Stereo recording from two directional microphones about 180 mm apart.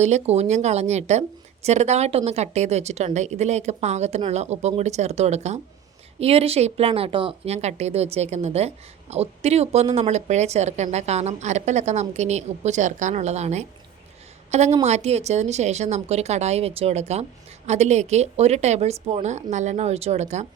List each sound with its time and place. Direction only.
0.0 s speech: 40° right (ahead or behind)